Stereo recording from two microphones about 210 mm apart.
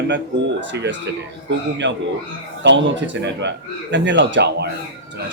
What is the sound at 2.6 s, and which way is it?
A man's voice, 60° right (ahead or behind).